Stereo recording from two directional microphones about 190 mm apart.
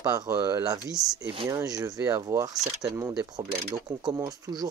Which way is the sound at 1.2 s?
25° right (ahead or behind).